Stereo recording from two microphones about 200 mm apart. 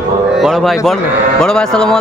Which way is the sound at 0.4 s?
Centre (ahead or behind).